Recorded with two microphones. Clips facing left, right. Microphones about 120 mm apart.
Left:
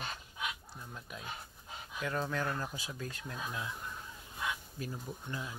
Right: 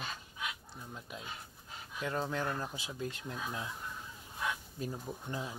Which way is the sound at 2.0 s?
25° right (ahead or behind).